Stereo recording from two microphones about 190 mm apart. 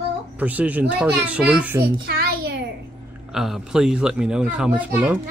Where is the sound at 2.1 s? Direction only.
55° right (ahead or behind).